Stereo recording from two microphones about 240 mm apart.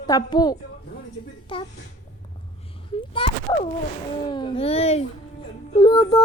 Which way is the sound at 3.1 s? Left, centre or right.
Left.